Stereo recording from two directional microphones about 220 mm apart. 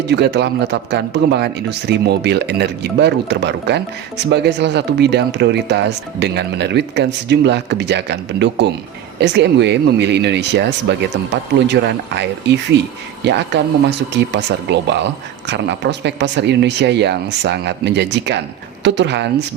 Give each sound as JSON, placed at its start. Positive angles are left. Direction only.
{"t": 0.1, "sound": "speech", "side_deg": -50}